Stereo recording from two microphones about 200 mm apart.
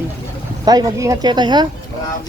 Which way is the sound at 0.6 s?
20° right (ahead or behind).